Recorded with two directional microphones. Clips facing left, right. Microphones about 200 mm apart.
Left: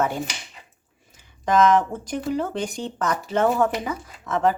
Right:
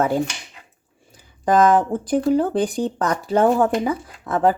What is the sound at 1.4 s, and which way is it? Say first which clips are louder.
Speech: right 2 dB; 35° right (ahead or behind).